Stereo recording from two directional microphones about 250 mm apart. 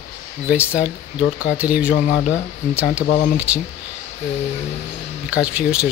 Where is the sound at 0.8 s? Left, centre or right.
Left.